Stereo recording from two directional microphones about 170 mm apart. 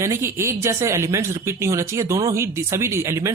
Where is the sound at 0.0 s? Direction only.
15° right (ahead or behind).